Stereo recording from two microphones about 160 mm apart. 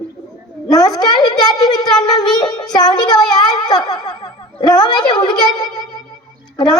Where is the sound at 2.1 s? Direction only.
25° left (ahead or behind).